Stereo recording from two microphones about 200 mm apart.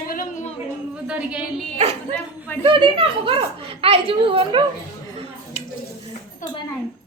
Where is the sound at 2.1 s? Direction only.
10° left (ahead or behind).